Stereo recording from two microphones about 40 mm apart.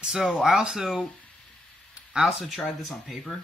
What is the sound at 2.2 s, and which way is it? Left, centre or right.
Speech, centre.